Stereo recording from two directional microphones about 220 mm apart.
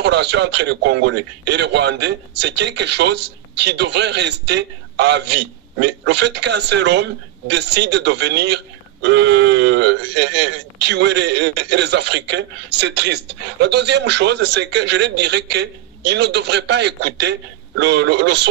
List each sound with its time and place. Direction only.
0.0 s a man's voice: 50° right (ahead or behind)